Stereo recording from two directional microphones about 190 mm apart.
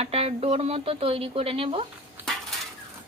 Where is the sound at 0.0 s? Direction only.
30° right (ahead or behind).